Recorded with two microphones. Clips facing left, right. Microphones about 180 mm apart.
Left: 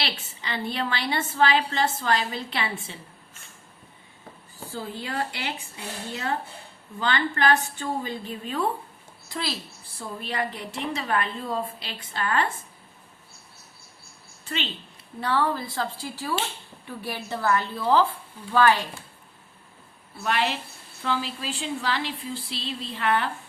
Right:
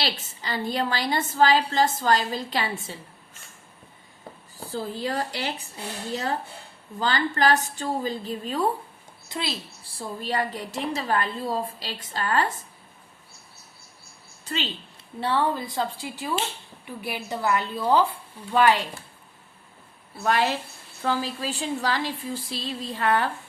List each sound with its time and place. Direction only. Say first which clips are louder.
0.0 s a woman's voice: right 3 dB; 40° right (ahead or behind)
4.5 s a woman's voice: right 3 dB; 40° right (ahead or behind)
9.3 s a woman's voice: right 1 dB; 20° right (ahead or behind)
10.2 s a woman's voice: right 3 dB; 35° right (ahead or behind)
14.4 s a woman's voice: right 1 dB; 35° right (ahead or behind)
15.2 s a woman's voice: right 1 dB; 25° right (ahead or behind)
20.2 s speech: right 3 dB; 40° right (ahead or behind)